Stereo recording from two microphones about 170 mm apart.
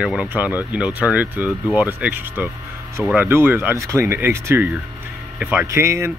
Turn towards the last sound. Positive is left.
turn(degrees=-15)  # may be behind; listen again after turning